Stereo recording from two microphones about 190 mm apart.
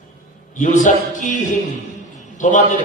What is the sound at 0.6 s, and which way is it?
A man's voice, 40° left (ahead or behind).